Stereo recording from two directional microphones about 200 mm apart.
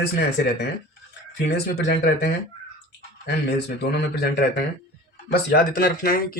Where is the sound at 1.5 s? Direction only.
55° left (ahead or behind).